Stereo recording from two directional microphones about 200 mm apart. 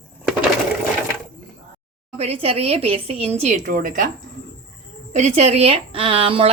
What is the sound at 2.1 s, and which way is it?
Speech, 30° right (ahead or behind).